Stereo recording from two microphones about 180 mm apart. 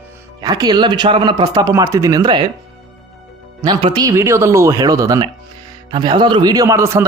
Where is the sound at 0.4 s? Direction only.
20° right (ahead or behind).